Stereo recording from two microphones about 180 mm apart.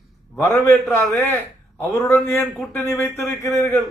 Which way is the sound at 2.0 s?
15° left (ahead or behind).